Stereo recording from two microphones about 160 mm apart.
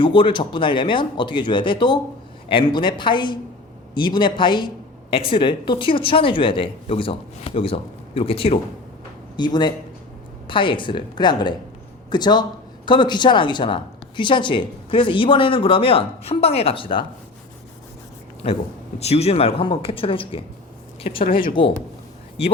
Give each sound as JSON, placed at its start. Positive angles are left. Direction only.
{"t": 0.0, "sound": "a woman's voice", "side_deg": 30}
{"t": 18.9, "sound": "a woman's voice", "side_deg": 40}